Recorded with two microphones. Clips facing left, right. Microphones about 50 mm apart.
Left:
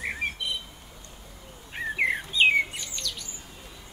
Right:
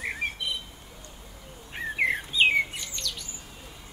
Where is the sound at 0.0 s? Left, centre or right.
Centre.